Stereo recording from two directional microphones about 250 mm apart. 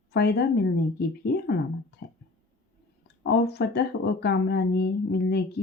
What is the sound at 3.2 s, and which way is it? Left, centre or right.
Speech, left.